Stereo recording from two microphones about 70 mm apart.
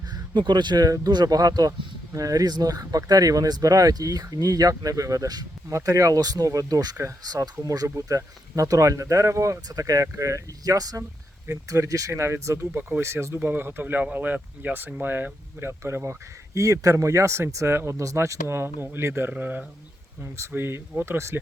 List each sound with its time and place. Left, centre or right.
0.1 s speech: right
1.1 s speech: right
5.6 s speech: right
20.2 s speech: right